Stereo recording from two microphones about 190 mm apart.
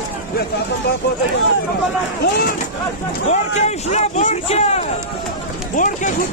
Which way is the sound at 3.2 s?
35° left (ahead or behind).